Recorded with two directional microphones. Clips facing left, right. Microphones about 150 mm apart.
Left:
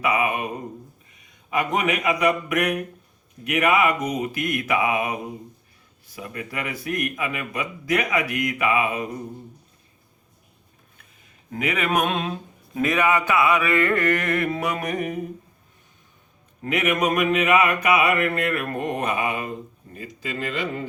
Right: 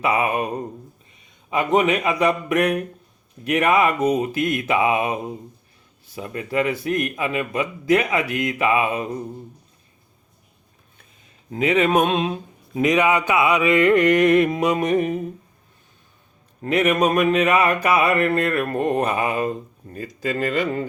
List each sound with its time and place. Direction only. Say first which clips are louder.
0.0 s a sound: right 2 dB; 35° right (ahead or behind)
1.2 s a man's voice: right 2 dB; 25° right (ahead or behind)
6.1 s a man's voice: right 8 dB; 30° right (ahead or behind)
11.5 s a man's voice: right 6 dB; 30° right (ahead or behind)
16.6 s a sound: right 4 dB; 35° right (ahead or behind)
20.2 s speech: right 6 dB; 45° right (ahead or behind)